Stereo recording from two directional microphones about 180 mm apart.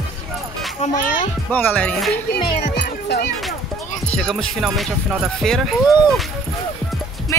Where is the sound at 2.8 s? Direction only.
65° left (ahead or behind).